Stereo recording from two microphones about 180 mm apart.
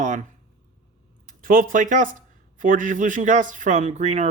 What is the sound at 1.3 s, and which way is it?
Speech, 50° right (ahead or behind).